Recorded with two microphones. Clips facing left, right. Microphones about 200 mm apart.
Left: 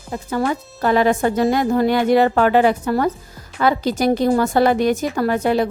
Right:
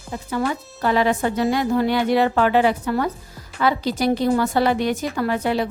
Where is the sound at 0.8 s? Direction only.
45° left (ahead or behind).